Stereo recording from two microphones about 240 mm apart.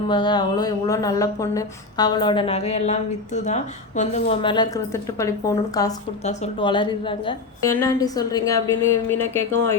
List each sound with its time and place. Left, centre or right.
0.1 s a woman's voice: centre